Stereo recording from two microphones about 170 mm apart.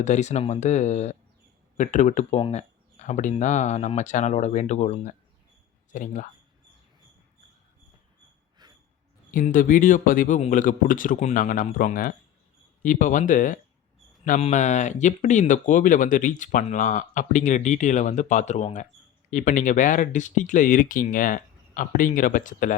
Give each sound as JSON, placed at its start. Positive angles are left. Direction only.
{"t": 0.0, "sound": "speech", "side_deg": 45}
{"t": 8.6, "sound": "a sound", "side_deg": -25}
{"t": 9.3, "sound": "speech", "side_deg": 50}